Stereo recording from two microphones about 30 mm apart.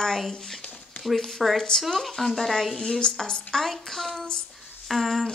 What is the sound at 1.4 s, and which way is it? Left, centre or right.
Speech, centre.